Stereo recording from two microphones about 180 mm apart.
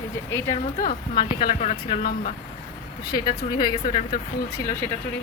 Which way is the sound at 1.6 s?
40° left (ahead or behind).